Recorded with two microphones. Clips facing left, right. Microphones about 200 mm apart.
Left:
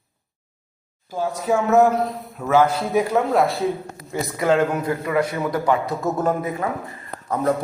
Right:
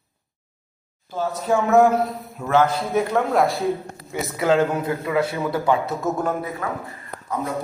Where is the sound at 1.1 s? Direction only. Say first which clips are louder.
Even; 10° left (ahead or behind).